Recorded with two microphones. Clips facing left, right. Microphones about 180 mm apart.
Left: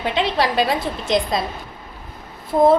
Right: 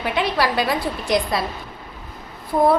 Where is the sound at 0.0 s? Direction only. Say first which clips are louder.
Left 1 dB; 25° left (ahead or behind).